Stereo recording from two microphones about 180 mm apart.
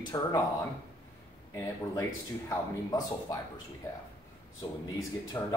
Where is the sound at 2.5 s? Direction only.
20° left (ahead or behind).